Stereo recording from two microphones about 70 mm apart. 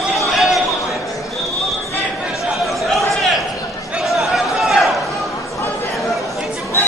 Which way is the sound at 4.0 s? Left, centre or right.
Centre.